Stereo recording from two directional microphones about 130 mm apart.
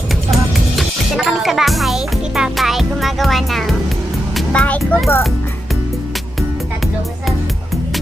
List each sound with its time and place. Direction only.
0.7 s music: centre (ahead or behind)
7.2 s music: centre (ahead or behind)